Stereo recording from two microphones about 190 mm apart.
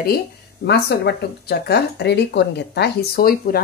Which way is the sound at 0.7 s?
60° left (ahead or behind).